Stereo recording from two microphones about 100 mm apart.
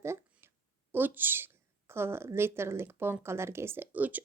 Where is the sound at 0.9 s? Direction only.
20° right (ahead or behind).